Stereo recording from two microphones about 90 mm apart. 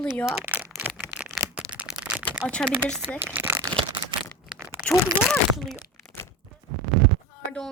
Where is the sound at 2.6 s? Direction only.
15° left (ahead or behind).